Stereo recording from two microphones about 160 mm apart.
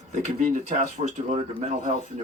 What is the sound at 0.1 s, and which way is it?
Speech, 50° right (ahead or behind).